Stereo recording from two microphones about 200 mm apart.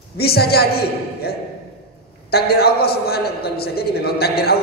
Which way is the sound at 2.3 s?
50° left (ahead or behind).